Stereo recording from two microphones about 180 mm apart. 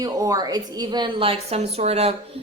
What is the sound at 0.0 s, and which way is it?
Speech, 20° right (ahead or behind).